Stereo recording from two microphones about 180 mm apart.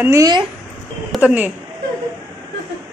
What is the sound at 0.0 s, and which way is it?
Speech, 20° right (ahead or behind).